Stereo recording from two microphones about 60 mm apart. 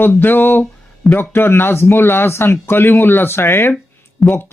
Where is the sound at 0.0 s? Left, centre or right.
Left.